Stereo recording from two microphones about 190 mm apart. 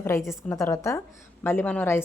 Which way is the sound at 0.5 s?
15° left (ahead or behind).